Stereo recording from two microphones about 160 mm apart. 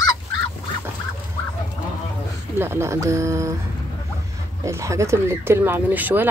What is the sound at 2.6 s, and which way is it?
Speech, 15° right (ahead or behind).